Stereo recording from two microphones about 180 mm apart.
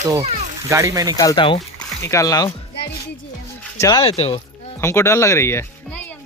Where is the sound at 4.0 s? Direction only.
30° left (ahead or behind).